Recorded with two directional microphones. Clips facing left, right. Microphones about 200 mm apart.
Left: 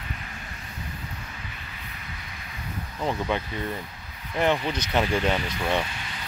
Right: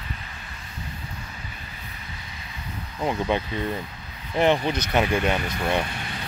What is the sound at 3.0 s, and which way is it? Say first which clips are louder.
Speech: right 3 dB; 15° right (ahead or behind).